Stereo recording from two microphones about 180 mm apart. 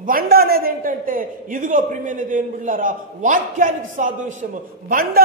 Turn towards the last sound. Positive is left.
turn(degrees=-55)  # may be behind; listen again after turning